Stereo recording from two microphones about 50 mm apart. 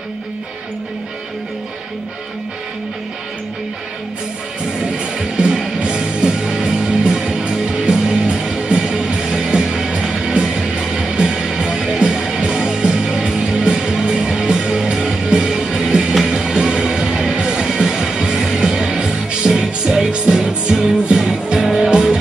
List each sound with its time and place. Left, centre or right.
4.9 s music: centre